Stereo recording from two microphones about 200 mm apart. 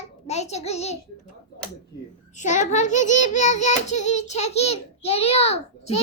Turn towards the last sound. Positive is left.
turn(degrees=30)  # may be behind; listen again after turning